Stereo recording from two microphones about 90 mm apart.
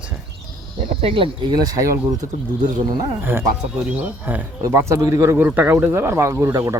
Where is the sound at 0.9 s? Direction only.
90° right; by 1.9 s 45° right (ahead or behind).